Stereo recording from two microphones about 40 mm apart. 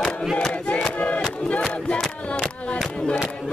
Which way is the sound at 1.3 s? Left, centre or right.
Left.